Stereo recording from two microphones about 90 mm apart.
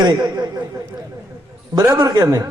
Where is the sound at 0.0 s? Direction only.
55° right (ahead or behind).